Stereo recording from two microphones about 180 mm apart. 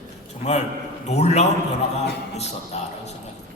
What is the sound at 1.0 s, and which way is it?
A man's voice, 40° left (ahead or behind).